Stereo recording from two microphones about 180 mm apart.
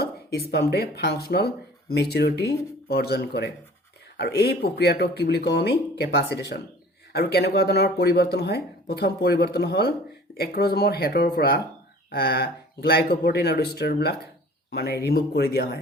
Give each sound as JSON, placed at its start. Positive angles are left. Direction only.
{"t": 0.0, "sound": "speech", "side_deg": 60}